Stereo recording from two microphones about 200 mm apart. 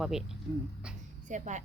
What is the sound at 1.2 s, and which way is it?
Speech, 35° right (ahead or behind).